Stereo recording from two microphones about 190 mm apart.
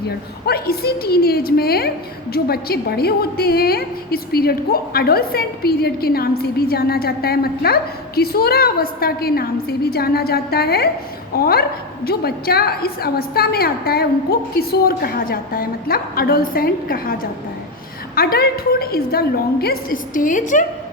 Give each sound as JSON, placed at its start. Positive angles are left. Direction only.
{"t": 0.4, "sound": "a woman's voice", "side_deg": 55}